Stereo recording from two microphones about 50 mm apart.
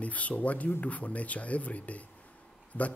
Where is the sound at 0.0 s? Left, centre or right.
Left.